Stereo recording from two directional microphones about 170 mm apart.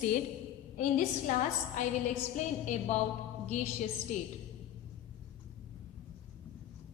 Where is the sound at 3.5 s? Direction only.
45° left (ahead or behind).